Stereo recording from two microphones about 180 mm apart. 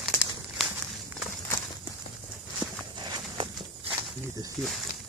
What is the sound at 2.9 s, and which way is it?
Walk, 25° right (ahead or behind).